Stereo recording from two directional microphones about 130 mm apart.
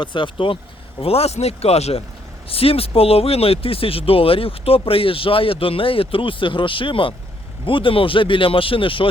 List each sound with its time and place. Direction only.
0.0 s speech: 40° left (ahead or behind)